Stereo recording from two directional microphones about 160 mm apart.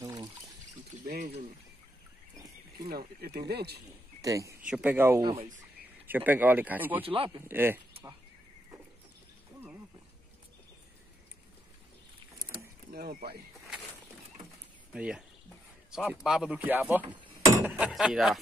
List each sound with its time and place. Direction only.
0.0 s trickle: 25° right (ahead or behind)
0.9 s a sound: 45° right (ahead or behind)
2.9 s speech: 75° right (ahead or behind); by 3.8 s 90° right
4.2 s speech: 20° right (ahead or behind)
4.6 s speech: 5° right (ahead or behind)
5.2 s speech: 40° right (ahead or behind)
6.0 s speech: 10° right (ahead or behind)
7.0 s speech: 35° right (ahead or behind)
7.4 s speech: 15° right (ahead or behind)
12.9 s speech: 70° right (ahead or behind)
14.9 s speech: 5° right (ahead or behind)